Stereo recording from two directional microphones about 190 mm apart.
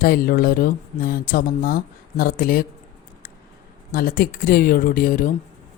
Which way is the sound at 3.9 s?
50° left (ahead or behind).